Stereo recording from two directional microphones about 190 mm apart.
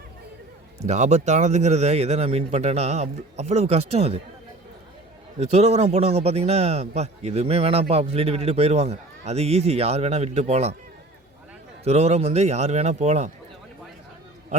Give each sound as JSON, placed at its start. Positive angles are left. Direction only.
{"t": 0.8, "sound": "a man's voice", "side_deg": -35}
{"t": 5.4, "sound": "a man's voice", "side_deg": -35}
{"t": 11.9, "sound": "a man's voice", "side_deg": -35}